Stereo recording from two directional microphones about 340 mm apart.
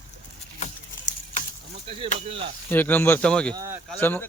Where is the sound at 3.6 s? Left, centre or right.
Centre.